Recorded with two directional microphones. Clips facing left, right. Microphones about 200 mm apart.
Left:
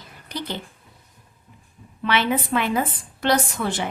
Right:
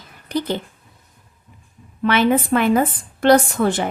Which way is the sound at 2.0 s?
45° right (ahead or behind).